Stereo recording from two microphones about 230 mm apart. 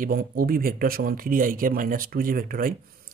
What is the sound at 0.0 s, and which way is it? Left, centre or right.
Speech, right.